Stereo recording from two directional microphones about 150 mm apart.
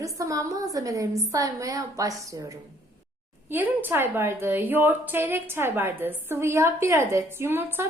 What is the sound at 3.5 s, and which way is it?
A woman's voice, 15° right (ahead or behind).